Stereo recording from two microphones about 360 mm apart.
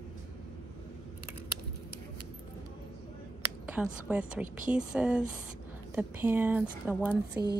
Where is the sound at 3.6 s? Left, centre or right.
Centre.